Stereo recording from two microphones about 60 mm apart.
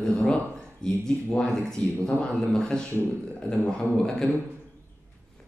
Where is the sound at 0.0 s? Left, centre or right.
Centre.